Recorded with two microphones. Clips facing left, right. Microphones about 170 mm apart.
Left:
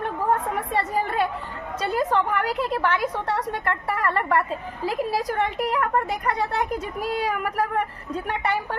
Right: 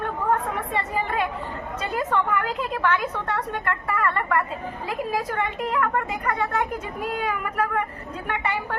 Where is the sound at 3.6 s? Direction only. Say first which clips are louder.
Right 1 dB; 35° left (ahead or behind).